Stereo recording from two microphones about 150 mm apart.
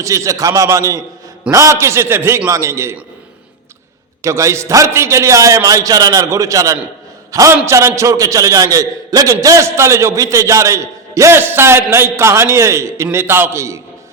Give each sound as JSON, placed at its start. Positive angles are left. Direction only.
{"t": 0.0, "sound": "a man's voice", "side_deg": -20}
{"t": 4.2, "sound": "a man's voice", "side_deg": -20}